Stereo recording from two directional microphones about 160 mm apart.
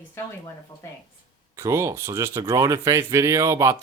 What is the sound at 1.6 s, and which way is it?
A man's voice, 20° right (ahead or behind).